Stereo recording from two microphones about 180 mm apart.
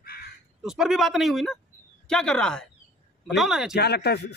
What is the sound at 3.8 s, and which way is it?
Speech, 65° left (ahead or behind).